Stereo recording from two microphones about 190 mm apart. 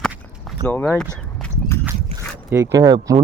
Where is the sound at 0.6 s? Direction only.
10° left (ahead or behind).